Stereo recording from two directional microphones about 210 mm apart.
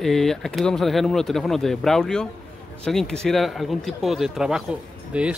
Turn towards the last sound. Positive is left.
turn(degrees=-5)  # may be behind; listen again after turning